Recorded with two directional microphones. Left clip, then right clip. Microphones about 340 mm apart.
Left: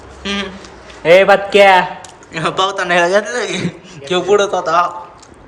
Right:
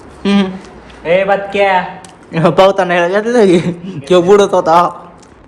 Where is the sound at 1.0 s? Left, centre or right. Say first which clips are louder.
Left 3 dB; left.